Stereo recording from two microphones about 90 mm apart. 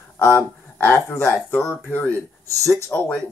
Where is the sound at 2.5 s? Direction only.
40° right (ahead or behind).